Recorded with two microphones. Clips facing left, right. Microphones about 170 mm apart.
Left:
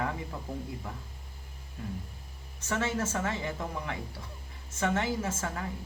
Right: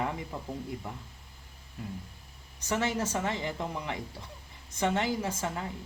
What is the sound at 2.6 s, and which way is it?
Speech, 15° right (ahead or behind).